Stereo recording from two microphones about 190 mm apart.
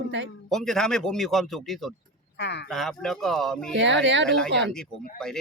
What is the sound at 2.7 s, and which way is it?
Speech, centre (ahead or behind).